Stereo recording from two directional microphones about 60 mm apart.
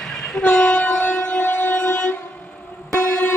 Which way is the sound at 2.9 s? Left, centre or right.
Left.